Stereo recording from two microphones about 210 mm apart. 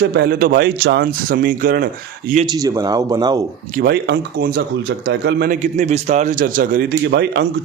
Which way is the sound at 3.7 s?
50° right (ahead or behind).